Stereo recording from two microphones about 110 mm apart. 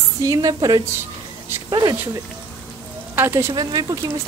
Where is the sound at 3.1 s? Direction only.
25° right (ahead or behind).